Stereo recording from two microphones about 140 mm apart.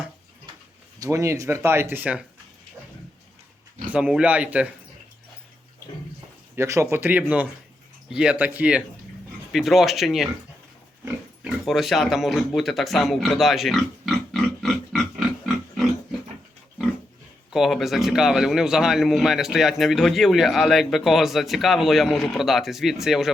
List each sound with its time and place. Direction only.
0.9 s speech: 25° right (ahead or behind)
3.9 s speech: 10° right (ahead or behind)
6.6 s speech: 20° right (ahead or behind); by 10.2 s centre (ahead or behind)
11.4 s speech: centre (ahead or behind)
17.5 s speech: centre (ahead or behind)